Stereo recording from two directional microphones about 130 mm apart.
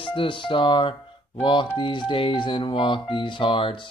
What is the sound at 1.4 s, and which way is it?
Music, 40° left (ahead or behind).